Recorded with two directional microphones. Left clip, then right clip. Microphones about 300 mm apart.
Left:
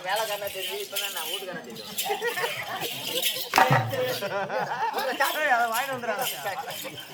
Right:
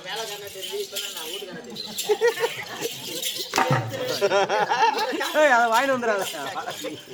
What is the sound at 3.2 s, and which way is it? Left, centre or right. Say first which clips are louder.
Music: left 3 dB; centre.